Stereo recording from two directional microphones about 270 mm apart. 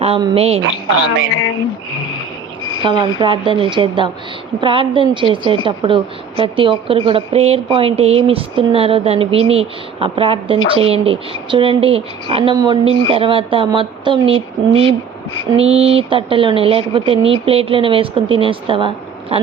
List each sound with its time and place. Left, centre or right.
0.0 s a woman's voice: centre
2.8 s a woman's voice: centre